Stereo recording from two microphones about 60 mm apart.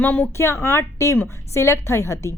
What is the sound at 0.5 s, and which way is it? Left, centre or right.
A woman's voice, left.